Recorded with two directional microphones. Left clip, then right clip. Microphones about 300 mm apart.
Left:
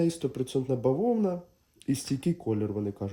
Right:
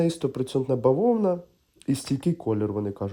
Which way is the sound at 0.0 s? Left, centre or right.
Right.